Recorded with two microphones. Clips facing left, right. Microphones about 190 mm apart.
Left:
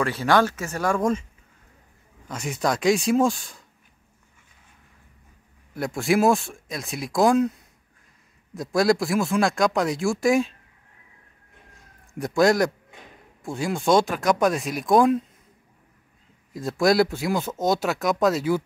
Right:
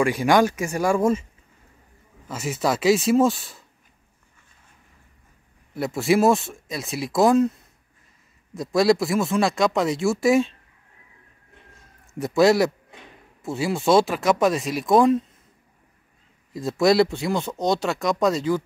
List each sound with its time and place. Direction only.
0.0 s speech: 15° right (ahead or behind)
2.2 s speech: 5° right (ahead or behind)
5.8 s speech: centre (ahead or behind)
8.5 s speech: centre (ahead or behind)
12.1 s speech: centre (ahead or behind)
16.5 s speech: centre (ahead or behind)